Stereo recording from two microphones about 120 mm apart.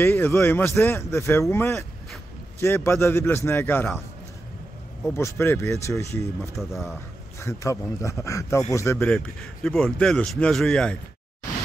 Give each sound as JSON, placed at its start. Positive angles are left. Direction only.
{"t": 0.0, "sound": "speech", "side_deg": 20}
{"t": 5.0, "sound": "speech", "side_deg": 20}
{"t": 6.5, "sound": "a man's voice", "side_deg": 0}
{"t": 7.3, "sound": "speech", "side_deg": 25}
{"t": 8.9, "sound": "a man's voice", "side_deg": 10}